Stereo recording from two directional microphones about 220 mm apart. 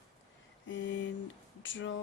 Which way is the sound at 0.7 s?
55° left (ahead or behind).